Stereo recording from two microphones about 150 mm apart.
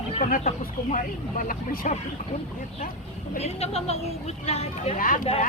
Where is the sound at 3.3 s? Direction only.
45° left (ahead or behind).